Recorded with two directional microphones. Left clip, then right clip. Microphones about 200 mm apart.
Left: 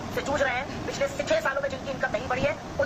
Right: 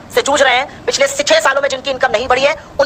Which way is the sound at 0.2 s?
45° right (ahead or behind).